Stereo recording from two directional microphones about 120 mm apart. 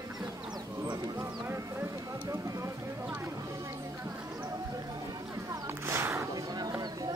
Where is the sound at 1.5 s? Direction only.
25° right (ahead or behind).